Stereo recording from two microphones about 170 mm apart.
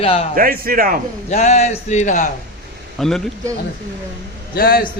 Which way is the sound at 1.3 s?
40° left (ahead or behind).